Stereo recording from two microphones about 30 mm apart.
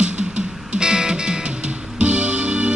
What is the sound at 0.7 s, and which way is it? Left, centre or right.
Music, right.